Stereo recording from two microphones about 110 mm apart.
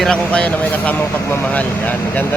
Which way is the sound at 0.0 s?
10° left (ahead or behind).